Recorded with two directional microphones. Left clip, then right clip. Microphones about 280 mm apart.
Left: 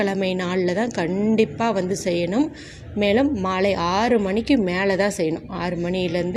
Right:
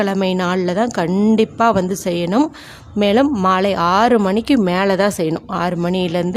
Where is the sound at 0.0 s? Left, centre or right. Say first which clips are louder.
Right 5 dB; centre.